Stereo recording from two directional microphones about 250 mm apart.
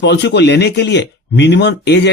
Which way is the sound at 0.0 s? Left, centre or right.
Left.